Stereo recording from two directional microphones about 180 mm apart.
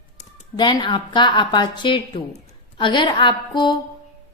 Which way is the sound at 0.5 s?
25° left (ahead or behind).